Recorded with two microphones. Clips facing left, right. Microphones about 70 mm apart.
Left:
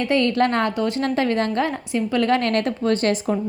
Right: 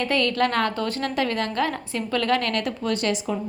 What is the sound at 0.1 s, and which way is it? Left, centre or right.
Speech, left.